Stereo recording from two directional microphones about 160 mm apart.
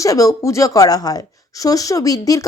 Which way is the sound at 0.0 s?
20° left (ahead or behind).